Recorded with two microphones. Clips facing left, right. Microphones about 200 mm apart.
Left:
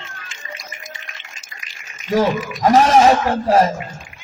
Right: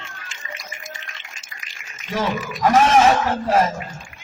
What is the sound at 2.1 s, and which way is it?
Speech, 35° left (ahead or behind).